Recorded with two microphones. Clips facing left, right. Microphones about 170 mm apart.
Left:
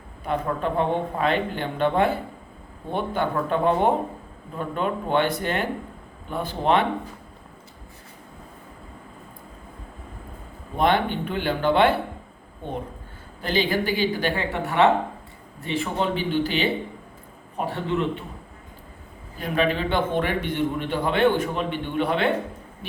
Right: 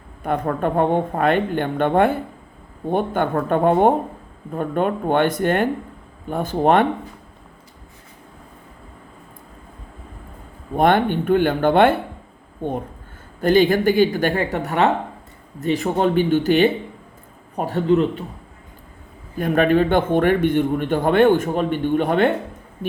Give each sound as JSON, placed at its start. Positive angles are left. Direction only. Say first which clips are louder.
{"t": 0.2, "sound": "a man's voice", "louder": "right 4 dB", "side_deg": -50}
{"t": 10.8, "sound": "a man's voice", "louder": "right 5 dB", "side_deg": -50}
{"t": 13.4, "sound": "a man's voice", "louder": "right 8 dB", "side_deg": -50}
{"t": 19.4, "sound": "a man's voice", "louder": "right 7 dB", "side_deg": -50}